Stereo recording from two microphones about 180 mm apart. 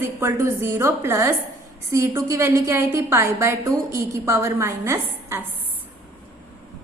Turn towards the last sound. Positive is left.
turn(degrees=-15)  # may be behind; listen again after turning